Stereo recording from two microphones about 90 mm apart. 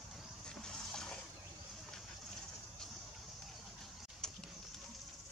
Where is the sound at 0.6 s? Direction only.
5° left (ahead or behind).